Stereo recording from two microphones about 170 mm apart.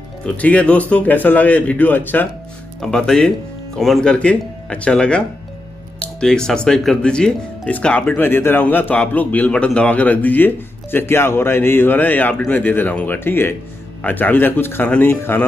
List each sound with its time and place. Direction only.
0.2 s speech: 10° left (ahead or behind)